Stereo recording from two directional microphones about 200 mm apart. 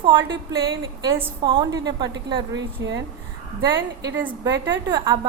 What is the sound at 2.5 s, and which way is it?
Speech, 60° right (ahead or behind).